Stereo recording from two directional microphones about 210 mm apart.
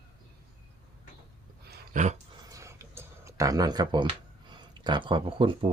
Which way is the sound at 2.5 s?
15° right (ahead or behind).